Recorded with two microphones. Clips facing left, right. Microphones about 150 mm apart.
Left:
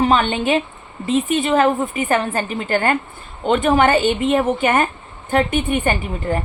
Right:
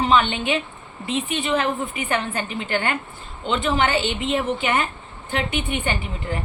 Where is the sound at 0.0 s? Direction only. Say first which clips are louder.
Left 3 dB; 45° left (ahead or behind).